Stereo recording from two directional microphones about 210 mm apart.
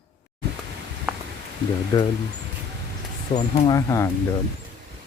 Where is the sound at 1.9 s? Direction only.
20° left (ahead or behind).